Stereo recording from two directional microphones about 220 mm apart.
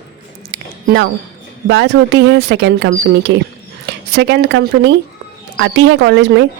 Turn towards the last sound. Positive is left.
turn(degrees=-55)  # may be behind; listen again after turning